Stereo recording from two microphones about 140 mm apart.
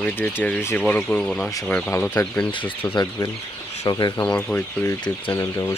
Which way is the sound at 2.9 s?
25° left (ahead or behind).